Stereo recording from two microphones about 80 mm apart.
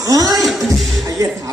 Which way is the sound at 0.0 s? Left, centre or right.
Right.